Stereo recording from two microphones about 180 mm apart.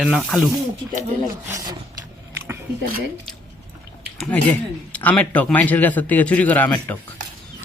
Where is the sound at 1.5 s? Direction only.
15° right (ahead or behind).